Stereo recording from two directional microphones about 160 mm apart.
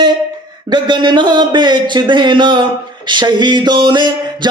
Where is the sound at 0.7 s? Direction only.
30° right (ahead or behind).